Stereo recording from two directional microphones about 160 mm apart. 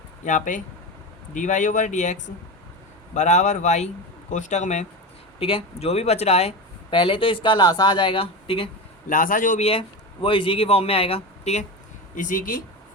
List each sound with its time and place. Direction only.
0.3 s speech: 55° left (ahead or behind)
3.2 s speech: 45° left (ahead or behind)
5.4 s a man's voice: 35° left (ahead or behind)
9.0 s a man's voice: 55° left (ahead or behind)
9.6 s a man's voice: 35° left (ahead or behind)
12.1 s a man's voice: 55° left (ahead or behind)